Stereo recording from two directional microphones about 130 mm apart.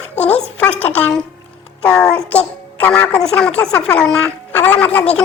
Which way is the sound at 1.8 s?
5° left (ahead or behind).